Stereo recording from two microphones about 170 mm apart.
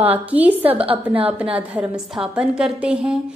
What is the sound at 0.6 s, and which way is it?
Speech, 35° right (ahead or behind).